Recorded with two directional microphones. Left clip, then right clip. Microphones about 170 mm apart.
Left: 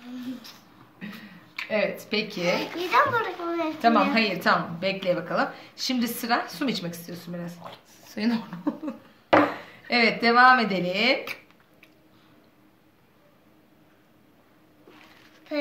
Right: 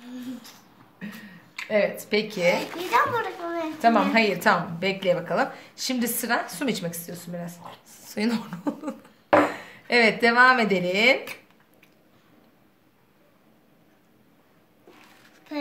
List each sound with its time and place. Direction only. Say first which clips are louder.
1.7 s a woman's voice: right 3 dB; 45° right (ahead or behind)
2.5 s a child's voice: even; 15° right (ahead or behind)
3.8 s a woman's voice: right 2 dB; 50° right (ahead or behind)